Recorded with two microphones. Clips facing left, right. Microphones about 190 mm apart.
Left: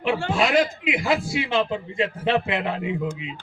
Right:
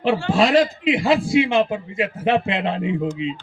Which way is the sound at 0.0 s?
35° right (ahead or behind).